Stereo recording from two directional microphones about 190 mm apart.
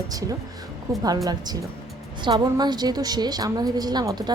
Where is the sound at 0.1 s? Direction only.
20° right (ahead or behind).